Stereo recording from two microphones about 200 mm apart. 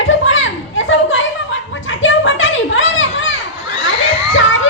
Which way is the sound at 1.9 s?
75° left (ahead or behind).